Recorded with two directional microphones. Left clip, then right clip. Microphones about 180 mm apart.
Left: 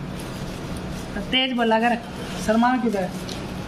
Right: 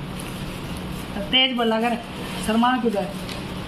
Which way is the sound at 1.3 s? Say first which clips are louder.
Right 1 dB; 5° left (ahead or behind).